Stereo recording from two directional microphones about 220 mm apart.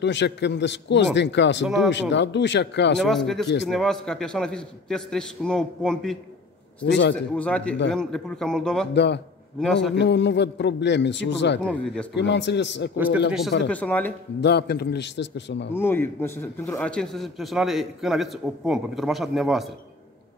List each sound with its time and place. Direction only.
0.0 s a man's voice: 50° left (ahead or behind)
3.0 s a man's voice: centre (ahead or behind)
6.8 s a man's voice: 55° left (ahead or behind)
7.3 s a man's voice: 5° left (ahead or behind)
8.9 s a man's voice: 50° left (ahead or behind)
11.6 s a man's voice: 5° left (ahead or behind)
12.1 s a man's voice: 50° left (ahead or behind)
12.9 s a man's voice: 5° right (ahead or behind)
13.7 s speech: 5° left (ahead or behind)
14.4 s a man's voice: 50° left (ahead or behind)
15.7 s a man's voice: 10° left (ahead or behind)